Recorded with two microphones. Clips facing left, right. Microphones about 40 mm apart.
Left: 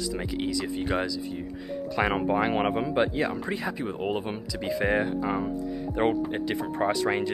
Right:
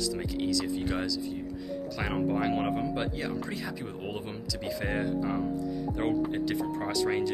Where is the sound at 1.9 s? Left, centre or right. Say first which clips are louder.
Left 5 dB; left.